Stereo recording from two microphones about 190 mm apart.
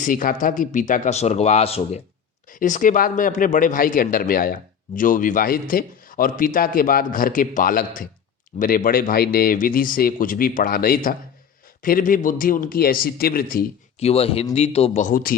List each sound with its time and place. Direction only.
0.0 s speech: 45° left (ahead or behind)
2.5 s a man's voice: 45° left (ahead or behind)
14.0 s speech: 30° left (ahead or behind); by 15.4 s 50° left (ahead or behind)